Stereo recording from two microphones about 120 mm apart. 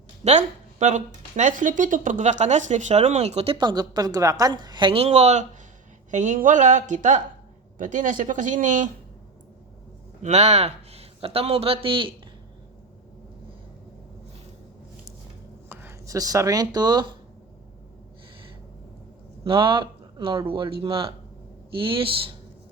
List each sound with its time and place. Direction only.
0.3 s speech: 75° right (ahead or behind)
6.1 s speech: 90° right
10.2 s a man's voice: 70° right (ahead or behind); by 12.1 s 45° right (ahead or behind)
15.7 s speech: 20° right (ahead or behind); by 17.2 s 35° right (ahead or behind)
19.5 s speech: 45° right (ahead or behind)